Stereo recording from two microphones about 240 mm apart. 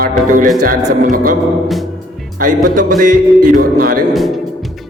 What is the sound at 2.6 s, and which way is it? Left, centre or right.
Speech, right.